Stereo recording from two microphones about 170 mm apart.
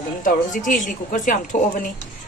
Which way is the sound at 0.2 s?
50° left (ahead or behind).